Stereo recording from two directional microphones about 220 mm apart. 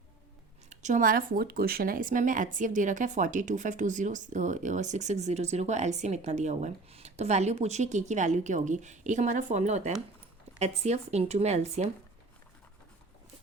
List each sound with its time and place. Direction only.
0.7 s speech: 35° right (ahead or behind)